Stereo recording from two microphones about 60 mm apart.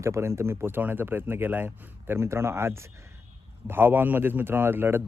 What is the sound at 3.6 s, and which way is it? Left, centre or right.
Speech, right.